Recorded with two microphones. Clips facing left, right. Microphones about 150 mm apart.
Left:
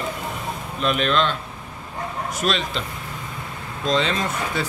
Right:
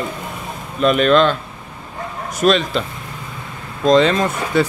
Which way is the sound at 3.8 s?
45° right (ahead or behind).